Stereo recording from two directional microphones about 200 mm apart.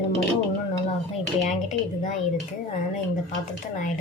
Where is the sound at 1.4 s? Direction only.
35° left (ahead or behind).